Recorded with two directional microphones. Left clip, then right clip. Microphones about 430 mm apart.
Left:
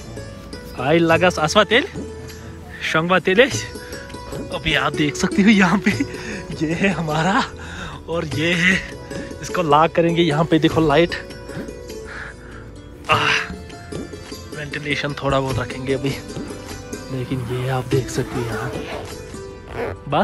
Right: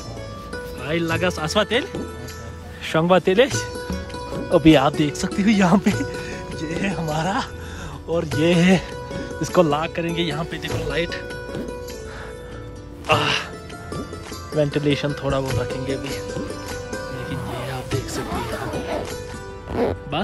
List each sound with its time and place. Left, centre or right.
0.7 s speech: centre
4.5 s speech: centre
9.7 s speech: centre
13.0 s music: centre
14.6 s speech: centre
17.6 s speech: centre
18.4 s speech: centre